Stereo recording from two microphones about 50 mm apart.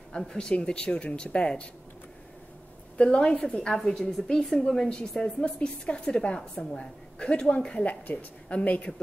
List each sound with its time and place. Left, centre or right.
0.1 s speech: centre
3.0 s a woman's voice: centre